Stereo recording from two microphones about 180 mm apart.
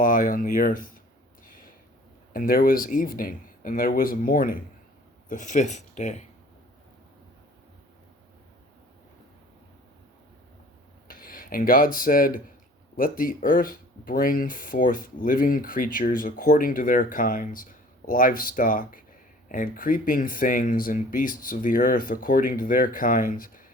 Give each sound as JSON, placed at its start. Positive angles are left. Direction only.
{"t": 0.0, "sound": "speech", "side_deg": 50}
{"t": 2.3, "sound": "speech", "side_deg": 55}
{"t": 11.1, "sound": "speech", "side_deg": 50}